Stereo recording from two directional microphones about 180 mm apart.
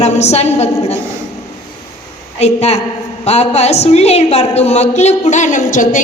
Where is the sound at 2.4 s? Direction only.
35° left (ahead or behind).